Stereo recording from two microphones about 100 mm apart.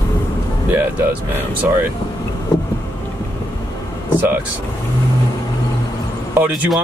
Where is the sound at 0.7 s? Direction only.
20° right (ahead or behind).